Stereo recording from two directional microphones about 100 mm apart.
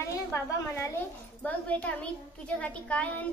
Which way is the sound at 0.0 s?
30° left (ahead or behind).